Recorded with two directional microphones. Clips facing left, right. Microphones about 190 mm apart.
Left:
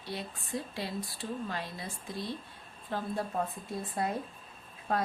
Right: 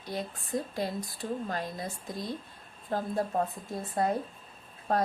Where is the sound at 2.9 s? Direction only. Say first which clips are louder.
Right 4 dB; 40° right (ahead or behind).